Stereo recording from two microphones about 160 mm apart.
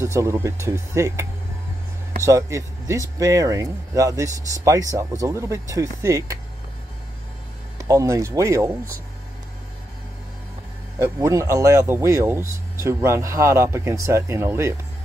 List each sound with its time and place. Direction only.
0.0 s speech: 20° right (ahead or behind)
2.2 s speech: 20° right (ahead or behind)
7.9 s speech: 20° right (ahead or behind)
11.0 s speech: 20° right (ahead or behind)